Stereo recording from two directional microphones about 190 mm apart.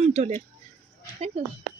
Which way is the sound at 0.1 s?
35° right (ahead or behind).